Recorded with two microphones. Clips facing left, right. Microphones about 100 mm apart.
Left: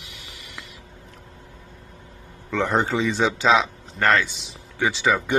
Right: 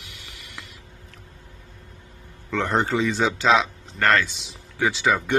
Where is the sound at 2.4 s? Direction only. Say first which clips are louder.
Left 1 dB; 5° left (ahead or behind).